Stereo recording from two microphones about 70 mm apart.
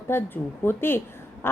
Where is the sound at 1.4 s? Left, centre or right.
Left.